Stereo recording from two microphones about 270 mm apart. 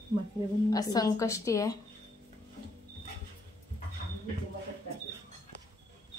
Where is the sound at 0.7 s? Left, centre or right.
Centre.